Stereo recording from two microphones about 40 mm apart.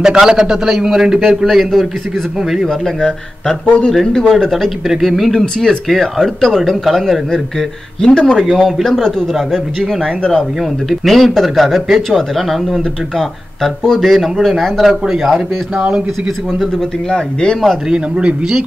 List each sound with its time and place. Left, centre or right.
0.0 s a man's voice: centre
2.7 s speech: centre
3.6 s speech: left
3.9 s speech: centre
4.8 s speech: centre
5.3 s speech: centre
8.0 s speech: left
10.0 s speech: centre
10.6 s a man's voice: centre
17.1 s speech: left
17.8 s a man's voice: right